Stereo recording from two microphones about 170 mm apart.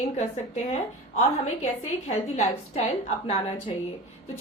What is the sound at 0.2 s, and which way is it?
A woman's voice, 40° left (ahead or behind).